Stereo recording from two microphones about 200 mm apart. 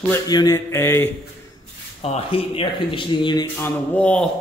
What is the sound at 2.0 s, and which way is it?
Speech, 30° left (ahead or behind).